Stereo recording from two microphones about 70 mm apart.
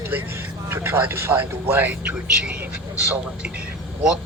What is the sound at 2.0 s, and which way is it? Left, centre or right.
Speech, centre.